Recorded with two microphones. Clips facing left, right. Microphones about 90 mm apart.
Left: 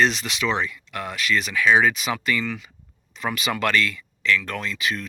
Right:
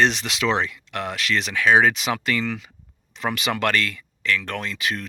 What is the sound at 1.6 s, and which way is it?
Speech, 60° right (ahead or behind).